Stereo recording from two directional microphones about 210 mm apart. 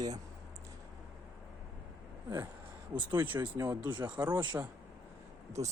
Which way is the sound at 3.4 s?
20° right (ahead or behind).